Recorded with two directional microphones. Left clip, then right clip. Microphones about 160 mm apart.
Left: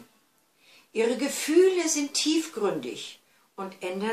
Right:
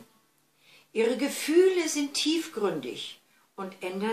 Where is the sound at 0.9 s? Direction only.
10° right (ahead or behind).